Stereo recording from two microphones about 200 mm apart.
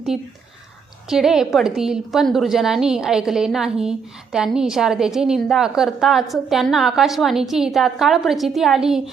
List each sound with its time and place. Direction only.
0.1 s a woman's voice: centre (ahead or behind)